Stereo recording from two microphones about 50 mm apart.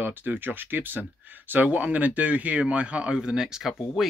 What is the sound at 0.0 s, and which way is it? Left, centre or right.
Speech, right.